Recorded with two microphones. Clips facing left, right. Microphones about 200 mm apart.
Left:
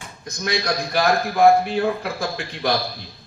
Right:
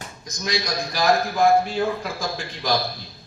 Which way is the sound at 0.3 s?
60° left (ahead or behind).